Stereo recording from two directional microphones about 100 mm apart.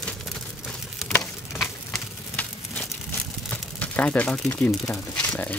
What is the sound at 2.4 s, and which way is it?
Crumpling, 15° left (ahead or behind).